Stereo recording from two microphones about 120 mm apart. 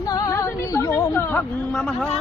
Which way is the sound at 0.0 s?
30° left (ahead or behind).